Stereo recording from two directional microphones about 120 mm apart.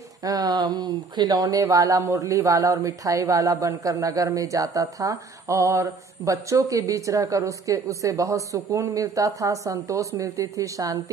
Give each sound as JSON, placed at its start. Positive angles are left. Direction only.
{"t": 0.2, "sound": "speech", "side_deg": -30}